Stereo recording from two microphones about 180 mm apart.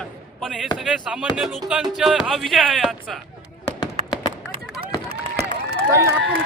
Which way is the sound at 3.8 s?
25° left (ahead or behind).